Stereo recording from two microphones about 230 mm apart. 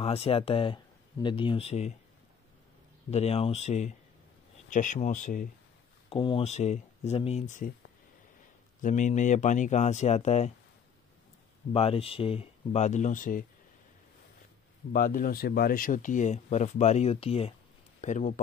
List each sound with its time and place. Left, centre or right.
0.0 s speech: left
3.1 s speech: left
6.0 s speech: left
8.8 s speech: left
11.7 s speech: left
14.9 s speech: left